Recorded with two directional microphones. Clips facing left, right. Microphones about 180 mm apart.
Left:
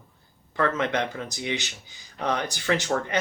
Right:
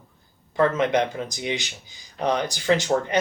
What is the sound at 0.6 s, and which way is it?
Speech, 15° right (ahead or behind).